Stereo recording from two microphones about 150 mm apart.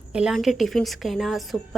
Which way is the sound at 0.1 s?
5° right (ahead or behind).